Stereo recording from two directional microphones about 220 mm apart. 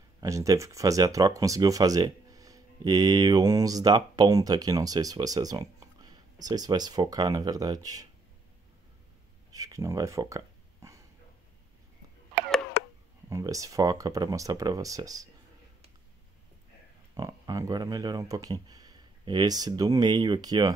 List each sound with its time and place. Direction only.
0.2 s speech: 15° right (ahead or behind)
9.5 s speech: 15° right (ahead or behind)
13.3 s speech: 15° right (ahead or behind)
17.1 s speech: 15° right (ahead or behind)